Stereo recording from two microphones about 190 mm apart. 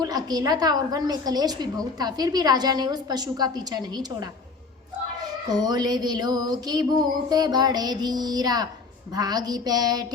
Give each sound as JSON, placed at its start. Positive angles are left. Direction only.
{"t": 0.0, "sound": "a woman's voice", "side_deg": -20}
{"t": 5.5, "sound": "a woman's voice", "side_deg": -20}